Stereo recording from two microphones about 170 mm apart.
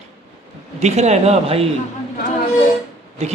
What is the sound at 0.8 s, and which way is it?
Speech, 40° right (ahead or behind).